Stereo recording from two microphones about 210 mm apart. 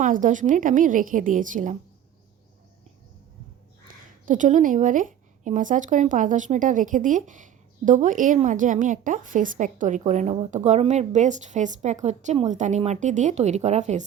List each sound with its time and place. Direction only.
0.0 s a woman's voice: 35° right (ahead or behind)
3.8 s a woman's voice: 40° right (ahead or behind)